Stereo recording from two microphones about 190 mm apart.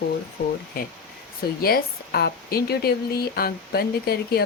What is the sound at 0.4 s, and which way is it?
Speech, 55° left (ahead or behind).